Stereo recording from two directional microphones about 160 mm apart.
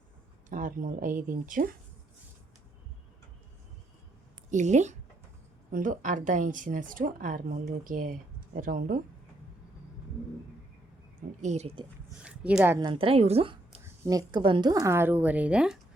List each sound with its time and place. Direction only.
0.5 s speech: 55° right (ahead or behind)
4.5 s speech: 45° right (ahead or behind)
11.4 s speech: 45° right (ahead or behind)
12.2 s speech: 5° right (ahead or behind)
12.8 s a woman's voice: 35° right (ahead or behind)
14.0 s speech: 25° right (ahead or behind); by 15.8 s 5° right (ahead or behind)